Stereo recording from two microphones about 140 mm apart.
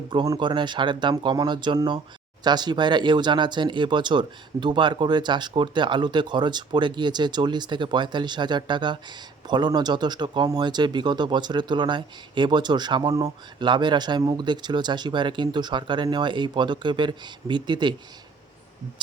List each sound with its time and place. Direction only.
0.1 s speech: 35° right (ahead or behind)